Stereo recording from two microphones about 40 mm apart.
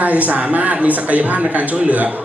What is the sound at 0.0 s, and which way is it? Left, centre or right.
Speech, right.